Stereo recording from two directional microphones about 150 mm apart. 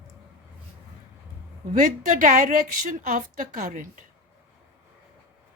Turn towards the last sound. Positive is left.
turn(degrees=-60)  # may be behind; listen again after turning